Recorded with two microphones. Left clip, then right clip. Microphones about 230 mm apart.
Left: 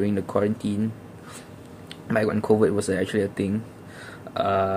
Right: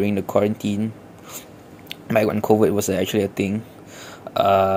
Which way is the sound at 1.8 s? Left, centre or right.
Centre.